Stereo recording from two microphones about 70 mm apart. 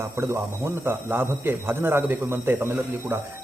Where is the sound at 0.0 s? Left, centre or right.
Right.